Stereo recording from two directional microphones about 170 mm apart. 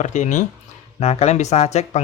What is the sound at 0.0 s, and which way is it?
Speech, 45° left (ahead or behind).